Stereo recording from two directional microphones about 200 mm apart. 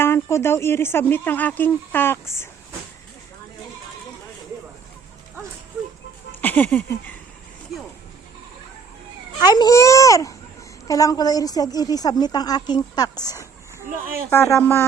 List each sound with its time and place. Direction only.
0.0 s speech: 15° left (ahead or behind)
6.4 s a sound: 10° left (ahead or behind)
9.4 s speech: 20° left (ahead or behind)